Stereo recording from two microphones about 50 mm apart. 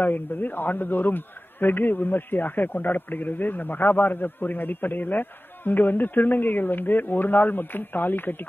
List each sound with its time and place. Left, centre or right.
0.0 s a man's voice: left